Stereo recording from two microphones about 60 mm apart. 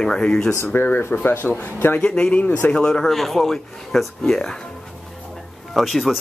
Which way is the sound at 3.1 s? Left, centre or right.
Centre.